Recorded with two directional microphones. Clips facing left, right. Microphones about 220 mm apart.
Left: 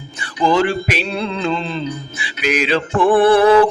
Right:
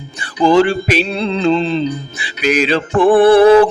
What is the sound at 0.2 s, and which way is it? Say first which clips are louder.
Music: right 5 dB; 30° right (ahead or behind).